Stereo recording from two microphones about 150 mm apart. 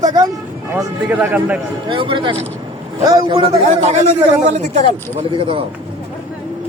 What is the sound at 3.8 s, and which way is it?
Speech, 45° right (ahead or behind).